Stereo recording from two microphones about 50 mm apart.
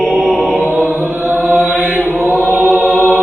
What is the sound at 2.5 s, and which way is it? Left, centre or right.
Choir, right.